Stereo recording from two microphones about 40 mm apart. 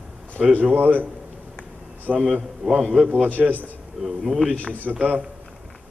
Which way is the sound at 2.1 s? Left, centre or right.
Centre.